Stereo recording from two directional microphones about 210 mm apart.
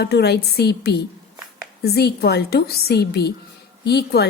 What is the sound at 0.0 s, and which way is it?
A woman's voice, 50° left (ahead or behind).